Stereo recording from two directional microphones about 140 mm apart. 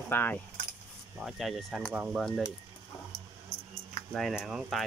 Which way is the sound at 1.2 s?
Centre (ahead or behind).